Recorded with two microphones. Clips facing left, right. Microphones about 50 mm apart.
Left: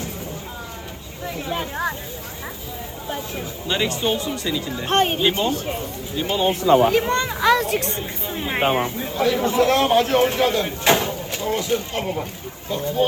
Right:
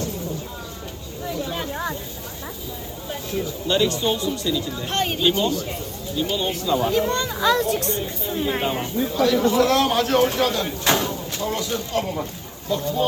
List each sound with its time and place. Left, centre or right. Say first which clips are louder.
1.3 s a sound: left 1 dB; left
1.7 s speech: left 2 dB; centre
3.7 s a man's voice: right 1 dB; left
6.7 s speech: left 7 dB; left
6.9 s speech: left 2 dB; left
8.6 s speech: left 5 dB; left
9.0 s a man's voice: right 1 dB; left